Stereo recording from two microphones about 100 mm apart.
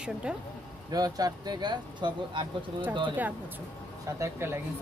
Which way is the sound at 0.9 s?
40° right (ahead or behind).